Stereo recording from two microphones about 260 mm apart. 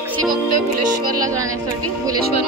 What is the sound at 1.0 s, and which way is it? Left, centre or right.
Speech, right.